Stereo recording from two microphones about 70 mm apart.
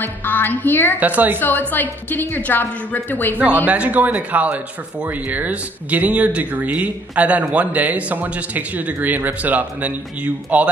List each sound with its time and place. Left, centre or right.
0.0 s a woman's voice: left
0.9 s speech: right
1.4 s a woman's voice: left
3.6 s speech: centre